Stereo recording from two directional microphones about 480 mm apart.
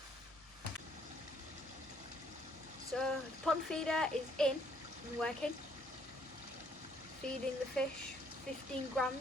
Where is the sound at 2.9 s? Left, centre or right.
Centre.